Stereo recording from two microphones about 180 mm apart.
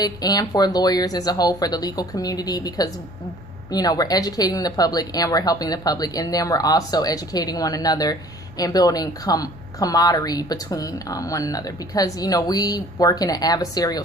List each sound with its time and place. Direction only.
0.0 s speech: 20° left (ahead or behind)